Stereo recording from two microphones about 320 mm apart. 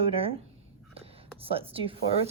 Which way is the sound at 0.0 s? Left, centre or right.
Centre.